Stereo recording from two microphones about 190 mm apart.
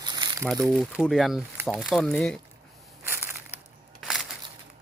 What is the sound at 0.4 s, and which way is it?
Speech, 5° left (ahead or behind).